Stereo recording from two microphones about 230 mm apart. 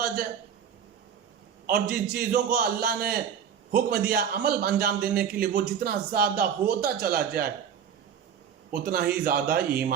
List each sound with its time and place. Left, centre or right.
1.6 s a man's voice: right
8.7 s a man's voice: right